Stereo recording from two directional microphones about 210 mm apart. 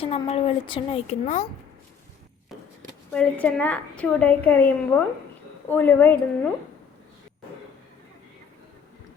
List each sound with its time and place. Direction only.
0.0 s a woman's voice: 30° left (ahead or behind)
3.1 s a woman's voice: 5° left (ahead or behind)